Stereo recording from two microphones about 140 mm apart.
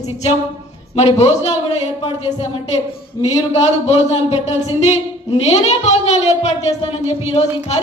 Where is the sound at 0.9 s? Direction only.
50° left (ahead or behind).